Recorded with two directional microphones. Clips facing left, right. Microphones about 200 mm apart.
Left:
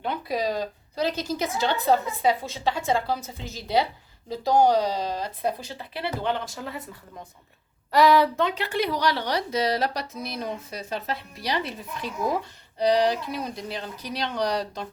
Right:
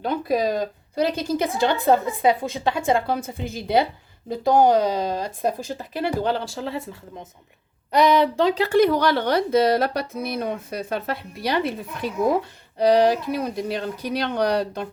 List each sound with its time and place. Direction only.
0.0 s a woman's voice: 45° right (ahead or behind)
6.2 s speech: 30° right (ahead or behind)
8.4 s speech: 35° right (ahead or behind); by 14.8 s 55° right (ahead or behind)